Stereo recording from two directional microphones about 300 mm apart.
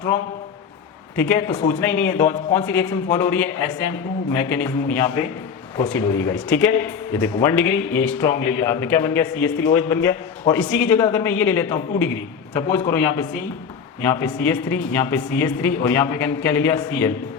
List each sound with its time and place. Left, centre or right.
1.1 s speech: centre
14.0 s speech: centre